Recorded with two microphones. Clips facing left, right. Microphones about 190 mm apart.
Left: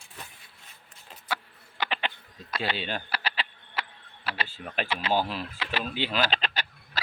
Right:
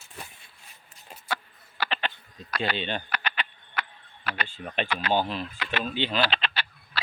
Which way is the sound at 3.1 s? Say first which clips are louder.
Even; 30° left (ahead or behind).